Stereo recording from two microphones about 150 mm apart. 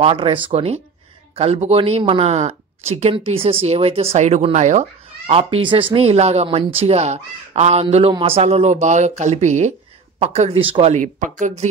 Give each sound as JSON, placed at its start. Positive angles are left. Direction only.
{"t": 0.0, "sound": "speech", "side_deg": -35}